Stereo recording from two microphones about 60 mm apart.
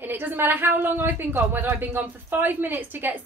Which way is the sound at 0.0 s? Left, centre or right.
Right.